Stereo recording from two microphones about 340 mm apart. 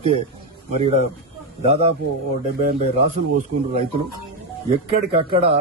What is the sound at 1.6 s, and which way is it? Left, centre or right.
Speech, centre.